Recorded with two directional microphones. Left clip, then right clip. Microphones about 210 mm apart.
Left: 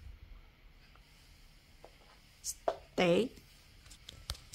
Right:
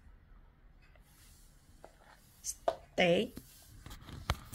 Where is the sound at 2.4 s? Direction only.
15° left (ahead or behind).